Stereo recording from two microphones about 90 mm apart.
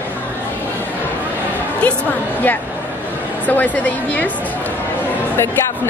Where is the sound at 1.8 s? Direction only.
15° left (ahead or behind).